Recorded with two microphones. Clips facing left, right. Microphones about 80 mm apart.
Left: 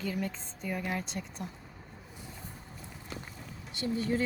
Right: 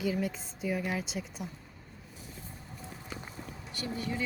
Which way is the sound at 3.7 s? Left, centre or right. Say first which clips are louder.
Left 5 dB; left.